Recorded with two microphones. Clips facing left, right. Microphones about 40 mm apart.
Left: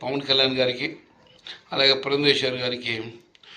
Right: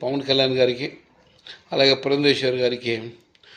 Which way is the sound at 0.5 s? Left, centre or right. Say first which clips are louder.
Right 4 dB; left.